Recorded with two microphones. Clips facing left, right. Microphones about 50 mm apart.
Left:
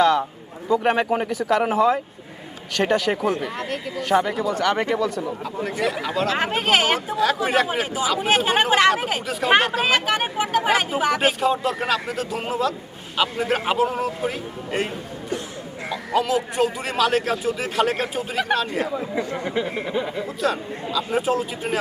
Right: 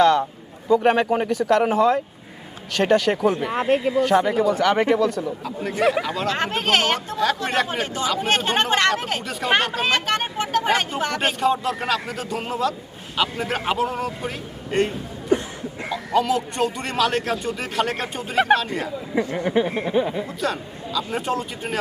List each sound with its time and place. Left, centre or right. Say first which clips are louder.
0.0 s a man's voice: right 1 dB; centre
3.5 s speech: right 9 dB; right
4.0 s speech: right 3 dB; centre
15.9 s speech: right 1 dB; centre
20.4 s speech: left 5 dB; centre